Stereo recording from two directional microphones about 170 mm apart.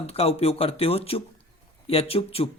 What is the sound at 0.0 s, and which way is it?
Speech, 35° left (ahead or behind).